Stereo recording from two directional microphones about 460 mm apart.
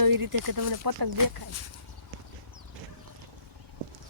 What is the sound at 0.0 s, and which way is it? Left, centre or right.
Speech, right.